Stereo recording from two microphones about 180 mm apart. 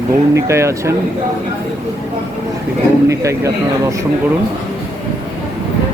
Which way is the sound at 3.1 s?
15° right (ahead or behind).